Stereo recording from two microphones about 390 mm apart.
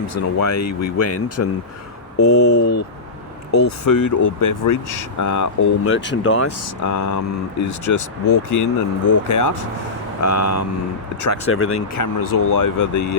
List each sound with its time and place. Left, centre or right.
0.1 s speech: left
5.9 s speech: left
6.8 s speech: left
11.4 s speech: left
11.9 s speech: left